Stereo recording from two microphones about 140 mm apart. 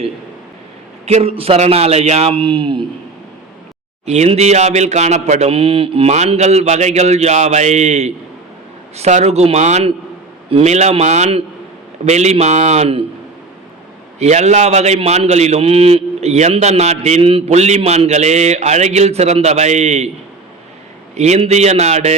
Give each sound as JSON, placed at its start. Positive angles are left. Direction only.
{"t": 1.0, "sound": "a man's voice", "side_deg": -45}
{"t": 4.0, "sound": "a man's voice", "side_deg": -50}
{"t": 14.2, "sound": "a man's voice", "side_deg": -55}
{"t": 21.2, "sound": "a man's voice", "side_deg": -55}